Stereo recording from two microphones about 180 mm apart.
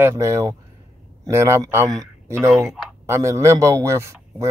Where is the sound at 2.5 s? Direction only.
Centre (ahead or behind).